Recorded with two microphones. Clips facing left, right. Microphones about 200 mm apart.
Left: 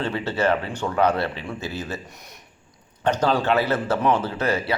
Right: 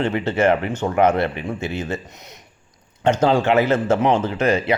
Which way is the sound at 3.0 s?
25° right (ahead or behind).